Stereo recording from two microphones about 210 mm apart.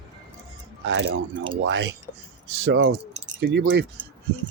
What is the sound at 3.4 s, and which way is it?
Speech, 60° right (ahead or behind).